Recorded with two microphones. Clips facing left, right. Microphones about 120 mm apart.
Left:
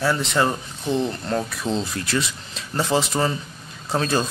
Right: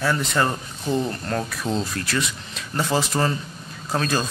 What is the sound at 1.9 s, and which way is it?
Speech, 25° left (ahead or behind).